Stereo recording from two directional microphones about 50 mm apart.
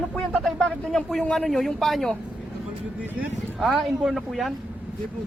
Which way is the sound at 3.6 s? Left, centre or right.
Centre.